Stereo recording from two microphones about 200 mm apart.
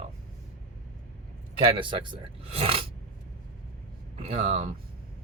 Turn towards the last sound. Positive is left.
turn(degrees=-30)  # may be behind; listen again after turning